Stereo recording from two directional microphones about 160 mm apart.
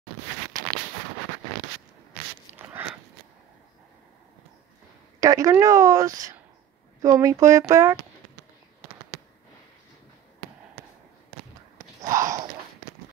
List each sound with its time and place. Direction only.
2.5 s biting: 15° right (ahead or behind)
5.2 s speech: 20° right (ahead or behind)
12.0 s a sound: 20° right (ahead or behind)